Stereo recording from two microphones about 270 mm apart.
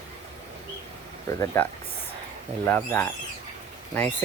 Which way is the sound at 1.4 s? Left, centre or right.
Centre.